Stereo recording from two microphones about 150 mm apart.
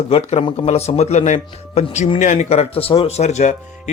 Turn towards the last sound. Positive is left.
turn(degrees=50)  # may be behind; listen again after turning